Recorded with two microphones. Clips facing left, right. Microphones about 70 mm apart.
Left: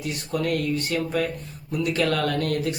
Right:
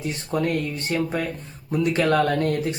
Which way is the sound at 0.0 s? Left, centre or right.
Right.